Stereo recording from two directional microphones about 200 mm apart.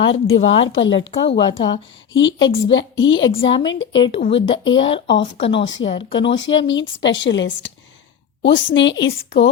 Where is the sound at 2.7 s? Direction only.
70° left (ahead or behind).